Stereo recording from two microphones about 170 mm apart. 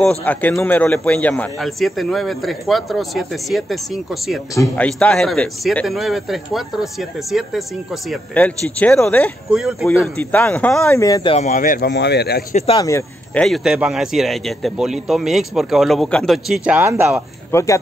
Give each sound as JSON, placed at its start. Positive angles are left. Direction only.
{"t": 0.0, "sound": "a man's voice", "side_deg": 5}
{"t": 9.8, "sound": "a man's voice", "side_deg": 10}
{"t": 10.9, "sound": "speech", "side_deg": 20}
{"t": 11.3, "sound": "speech", "side_deg": 45}
{"t": 11.9, "sound": "speech", "side_deg": 80}
{"t": 12.7, "sound": "speech", "side_deg": 20}
{"t": 13.3, "sound": "a man's voice", "side_deg": 5}
{"t": 17.5, "sound": "speech", "side_deg": 15}